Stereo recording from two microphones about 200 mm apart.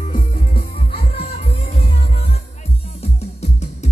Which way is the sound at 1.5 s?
30° left (ahead or behind).